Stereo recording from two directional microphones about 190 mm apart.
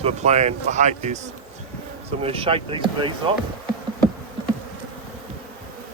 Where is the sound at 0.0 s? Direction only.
35° right (ahead or behind).